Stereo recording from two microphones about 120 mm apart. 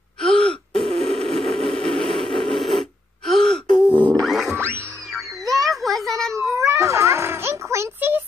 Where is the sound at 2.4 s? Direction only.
Centre (ahead or behind).